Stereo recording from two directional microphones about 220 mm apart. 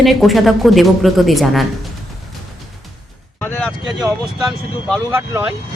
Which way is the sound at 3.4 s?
5° left (ahead or behind).